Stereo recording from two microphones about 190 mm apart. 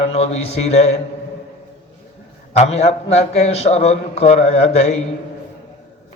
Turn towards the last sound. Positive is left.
turn(degrees=35)  # may be behind; listen again after turning